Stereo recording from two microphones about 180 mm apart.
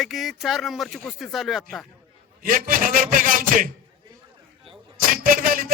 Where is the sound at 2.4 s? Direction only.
50° right (ahead or behind).